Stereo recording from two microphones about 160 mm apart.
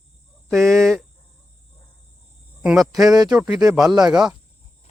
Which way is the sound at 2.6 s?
Centre (ahead or behind).